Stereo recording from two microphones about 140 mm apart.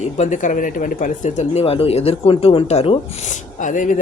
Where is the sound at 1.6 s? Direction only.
45° left (ahead or behind).